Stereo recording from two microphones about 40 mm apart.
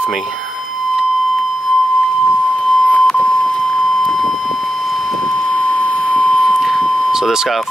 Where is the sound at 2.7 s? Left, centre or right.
Left.